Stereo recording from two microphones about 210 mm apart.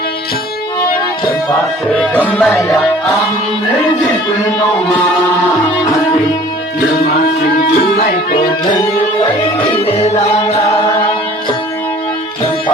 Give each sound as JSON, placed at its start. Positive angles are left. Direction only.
{"t": 1.9, "sound": "music", "side_deg": 5}
{"t": 7.0, "sound": "music", "side_deg": 45}
{"t": 9.6, "sound": "music", "side_deg": 25}